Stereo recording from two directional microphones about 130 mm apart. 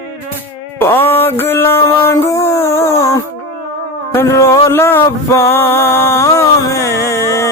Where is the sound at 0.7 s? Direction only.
15° left (ahead or behind).